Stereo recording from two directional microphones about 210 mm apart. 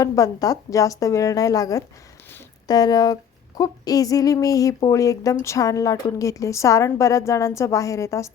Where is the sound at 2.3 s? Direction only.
20° left (ahead or behind).